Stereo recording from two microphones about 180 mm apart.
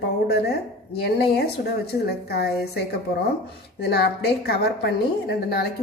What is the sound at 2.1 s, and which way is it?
A woman's voice, 65° left (ahead or behind).